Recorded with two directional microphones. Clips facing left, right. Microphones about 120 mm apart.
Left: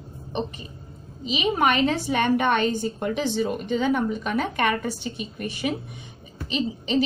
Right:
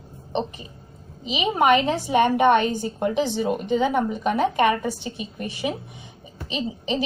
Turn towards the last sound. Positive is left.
turn(degrees=-20)  # may be behind; listen again after turning